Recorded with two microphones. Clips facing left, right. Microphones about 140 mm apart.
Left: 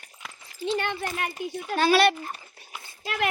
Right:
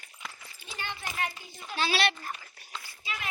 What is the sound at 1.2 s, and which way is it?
Speech, 60° left (ahead or behind).